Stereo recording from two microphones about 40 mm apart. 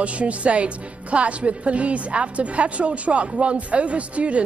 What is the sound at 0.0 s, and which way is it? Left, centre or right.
A woman's voice, right.